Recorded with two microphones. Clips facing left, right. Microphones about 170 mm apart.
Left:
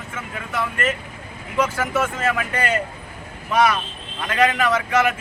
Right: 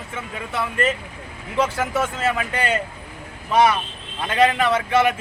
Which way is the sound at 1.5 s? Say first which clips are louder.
Even; 30° right (ahead or behind).